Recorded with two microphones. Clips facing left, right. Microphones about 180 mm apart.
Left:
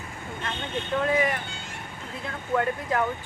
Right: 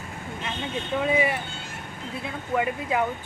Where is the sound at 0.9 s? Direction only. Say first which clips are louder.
Even; 10° right (ahead or behind).